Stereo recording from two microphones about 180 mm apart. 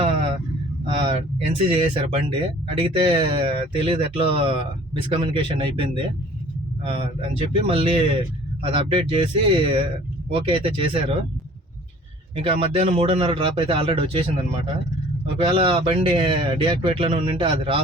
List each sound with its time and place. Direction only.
0.9 s a man's voice: 30° right (ahead or behind)
12.4 s a man's voice: 30° right (ahead or behind)